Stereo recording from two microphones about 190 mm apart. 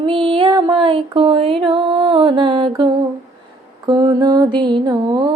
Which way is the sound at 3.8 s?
20° right (ahead or behind).